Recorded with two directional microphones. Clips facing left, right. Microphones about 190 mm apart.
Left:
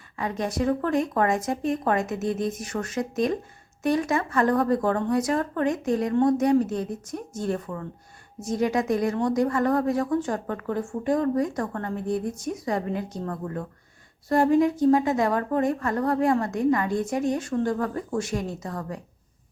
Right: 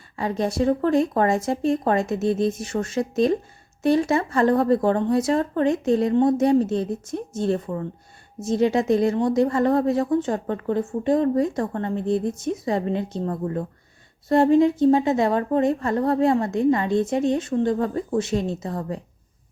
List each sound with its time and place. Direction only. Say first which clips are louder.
0.2 s speech: right 4 dB; 30° right (ahead or behind)